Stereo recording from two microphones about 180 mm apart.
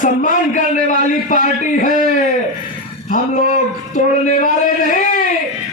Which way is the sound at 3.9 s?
45° left (ahead or behind).